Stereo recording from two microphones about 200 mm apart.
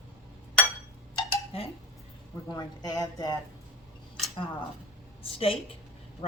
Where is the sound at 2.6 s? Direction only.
20° left (ahead or behind).